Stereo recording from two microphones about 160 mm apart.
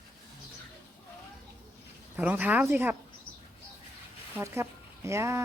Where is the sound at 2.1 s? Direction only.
10° right (ahead or behind).